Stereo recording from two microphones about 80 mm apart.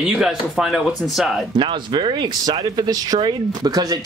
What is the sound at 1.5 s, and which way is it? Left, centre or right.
Speech, right.